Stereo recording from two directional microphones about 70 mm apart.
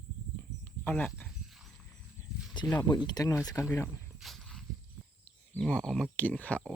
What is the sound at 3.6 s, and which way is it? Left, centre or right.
Speech, left.